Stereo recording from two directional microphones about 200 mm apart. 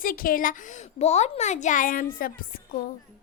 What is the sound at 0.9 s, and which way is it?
Speech, 35° left (ahead or behind).